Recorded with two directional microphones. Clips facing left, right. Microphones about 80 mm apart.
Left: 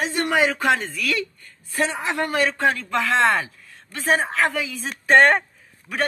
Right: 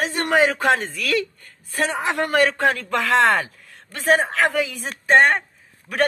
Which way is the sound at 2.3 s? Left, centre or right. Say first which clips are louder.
Right 3 dB; right.